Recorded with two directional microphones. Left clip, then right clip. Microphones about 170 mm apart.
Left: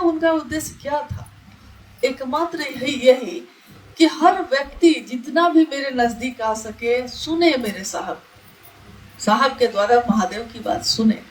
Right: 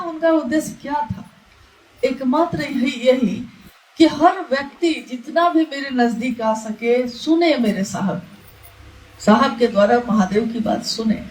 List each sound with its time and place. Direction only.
0.2 s a woman's voice: 45° left (ahead or behind)
2.0 s a woman's voice: 45° left (ahead or behind)
9.2 s a woman's voice: 45° left (ahead or behind)